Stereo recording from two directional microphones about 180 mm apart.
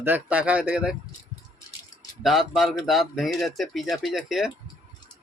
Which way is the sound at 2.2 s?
Centre (ahead or behind).